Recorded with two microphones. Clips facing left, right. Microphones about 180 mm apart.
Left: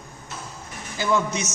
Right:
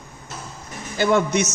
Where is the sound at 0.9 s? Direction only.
65° right (ahead or behind).